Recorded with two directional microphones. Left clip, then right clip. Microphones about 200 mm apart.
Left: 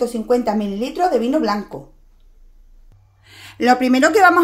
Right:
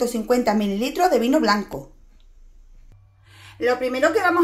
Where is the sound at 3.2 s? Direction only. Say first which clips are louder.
Left 4 dB; 55° left (ahead or behind).